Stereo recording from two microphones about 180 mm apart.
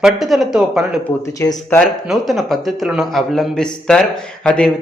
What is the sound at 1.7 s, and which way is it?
A man's voice, centre (ahead or behind).